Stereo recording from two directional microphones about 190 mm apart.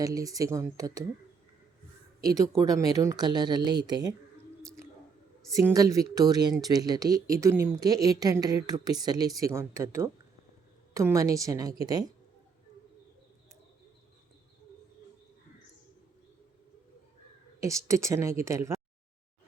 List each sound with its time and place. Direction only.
0.0 s a woman's voice: 20° right (ahead or behind)
2.2 s a woman's voice: 20° right (ahead or behind)
5.5 s a woman's voice: 15° right (ahead or behind)
17.6 s a woman's voice: 15° right (ahead or behind)